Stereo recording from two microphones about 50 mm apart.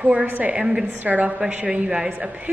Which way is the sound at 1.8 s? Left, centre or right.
Centre.